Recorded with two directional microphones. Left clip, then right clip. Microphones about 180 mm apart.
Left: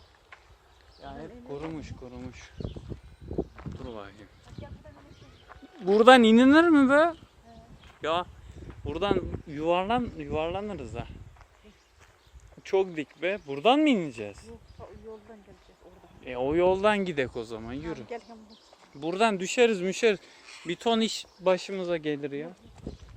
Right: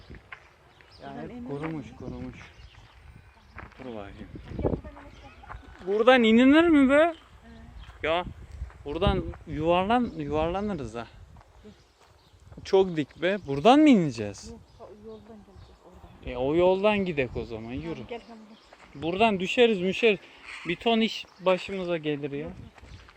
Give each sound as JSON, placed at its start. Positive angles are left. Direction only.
{"t": 1.5, "sound": "speech", "side_deg": 0}
{"t": 3.5, "sound": "a sound", "side_deg": 5}
{"t": 5.9, "sound": "speech", "side_deg": 45}
{"t": 8.8, "sound": "speech", "side_deg": 0}
{"t": 12.6, "sound": "speech", "side_deg": -10}
{"t": 16.2, "sound": "speech", "side_deg": 10}
{"t": 18.9, "sound": "speech", "side_deg": 10}